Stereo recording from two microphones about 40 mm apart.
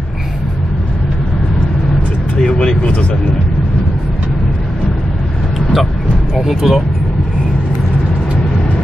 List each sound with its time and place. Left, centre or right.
2.8 s speech: left
6.3 s speech: centre